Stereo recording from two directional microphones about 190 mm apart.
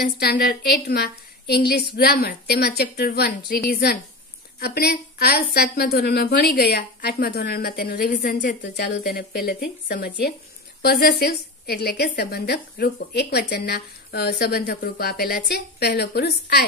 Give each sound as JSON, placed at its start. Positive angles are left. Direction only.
{"t": 0.0, "sound": "a woman's voice", "side_deg": 55}